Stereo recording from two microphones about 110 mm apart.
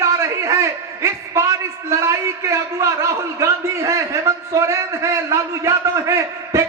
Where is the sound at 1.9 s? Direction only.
25° right (ahead or behind).